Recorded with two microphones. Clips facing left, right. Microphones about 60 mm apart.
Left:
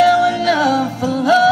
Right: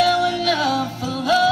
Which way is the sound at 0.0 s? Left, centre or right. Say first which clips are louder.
Left 6 dB; left.